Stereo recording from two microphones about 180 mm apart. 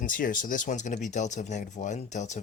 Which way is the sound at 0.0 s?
50° left (ahead or behind).